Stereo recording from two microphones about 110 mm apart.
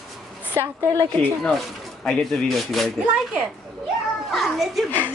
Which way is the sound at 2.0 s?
5° left (ahead or behind).